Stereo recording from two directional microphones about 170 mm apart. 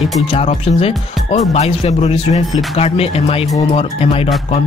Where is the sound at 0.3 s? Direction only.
35° left (ahead or behind).